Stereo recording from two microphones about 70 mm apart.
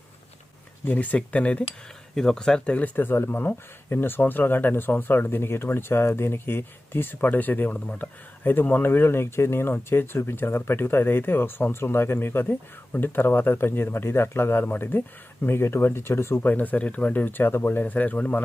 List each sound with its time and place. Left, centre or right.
0.9 s speech: left
2.1 s speech: centre
2.7 s speech: left